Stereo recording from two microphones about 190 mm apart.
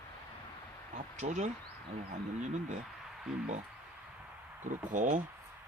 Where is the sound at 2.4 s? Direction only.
40° right (ahead or behind).